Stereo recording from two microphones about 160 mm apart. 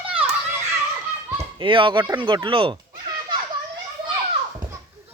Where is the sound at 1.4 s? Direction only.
30° right (ahead or behind).